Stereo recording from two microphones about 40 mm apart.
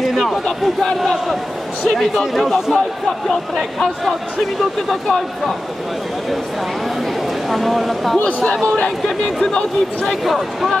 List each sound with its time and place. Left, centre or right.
0.0 s a sound: centre
1.9 s speech: centre
2.4 s speech: centre
3.3 s speech: centre
7.4 s speech: centre
8.2 s a man's voice: left
9.0 s speech: centre
10.2 s speech: centre